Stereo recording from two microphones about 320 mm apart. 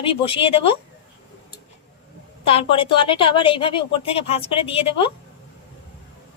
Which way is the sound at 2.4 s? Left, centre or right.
Centre.